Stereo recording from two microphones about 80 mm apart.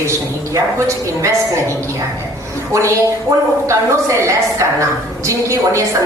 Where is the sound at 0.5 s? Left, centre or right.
Right.